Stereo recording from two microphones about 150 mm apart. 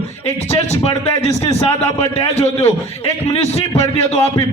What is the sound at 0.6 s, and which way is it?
Speech, 45° left (ahead or behind).